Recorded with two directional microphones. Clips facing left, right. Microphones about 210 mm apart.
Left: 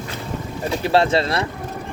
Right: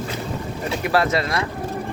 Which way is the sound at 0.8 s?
30° left (ahead or behind).